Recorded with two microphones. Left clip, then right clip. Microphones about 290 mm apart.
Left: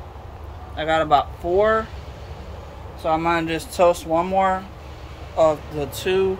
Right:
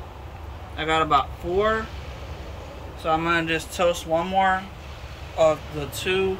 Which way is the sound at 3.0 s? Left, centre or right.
Centre.